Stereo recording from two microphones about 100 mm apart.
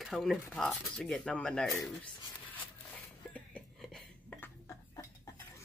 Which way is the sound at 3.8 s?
5° left (ahead or behind).